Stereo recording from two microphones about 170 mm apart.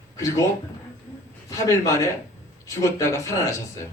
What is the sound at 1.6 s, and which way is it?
A man's voice, 20° left (ahead or behind).